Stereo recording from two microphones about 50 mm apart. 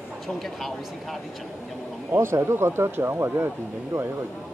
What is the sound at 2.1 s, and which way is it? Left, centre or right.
Speech, right.